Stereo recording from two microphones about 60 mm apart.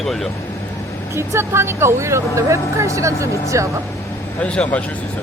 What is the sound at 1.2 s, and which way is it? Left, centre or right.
Speech, right.